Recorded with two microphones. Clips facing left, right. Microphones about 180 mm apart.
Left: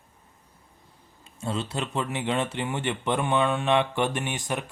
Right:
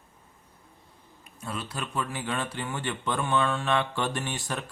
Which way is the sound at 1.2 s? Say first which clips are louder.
Left 6 dB; 25° left (ahead or behind).